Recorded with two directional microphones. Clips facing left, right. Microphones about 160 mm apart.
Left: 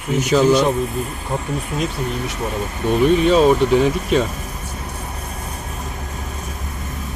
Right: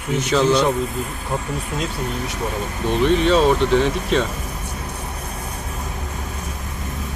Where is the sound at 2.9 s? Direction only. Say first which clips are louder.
Left 2 dB; 5° left (ahead or behind).